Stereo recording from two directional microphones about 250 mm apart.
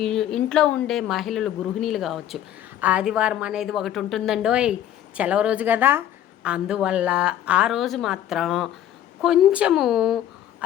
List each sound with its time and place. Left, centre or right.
0.0 s a woman's voice: centre